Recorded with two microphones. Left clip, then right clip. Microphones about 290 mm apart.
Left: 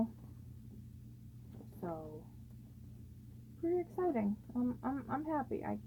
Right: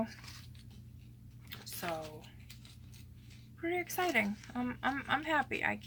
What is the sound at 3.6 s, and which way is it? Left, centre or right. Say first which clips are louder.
Speech: right 1 dB; right.